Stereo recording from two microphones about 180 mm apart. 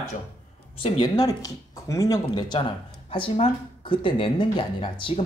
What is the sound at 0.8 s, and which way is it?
Speech, 30° left (ahead or behind).